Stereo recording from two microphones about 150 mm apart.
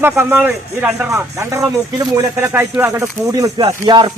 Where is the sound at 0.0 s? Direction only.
15° right (ahead or behind).